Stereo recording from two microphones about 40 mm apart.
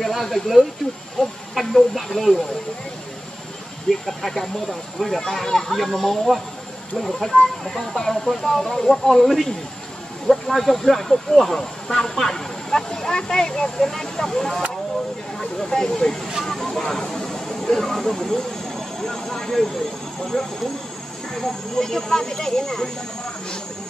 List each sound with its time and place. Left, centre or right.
0.0 s speech: centre
1.2 s speech: centre
1.5 s speech: centre
4.0 s speech: centre
10.5 s speech: centre
18.9 s vehicle: centre
20.3 s speech: centre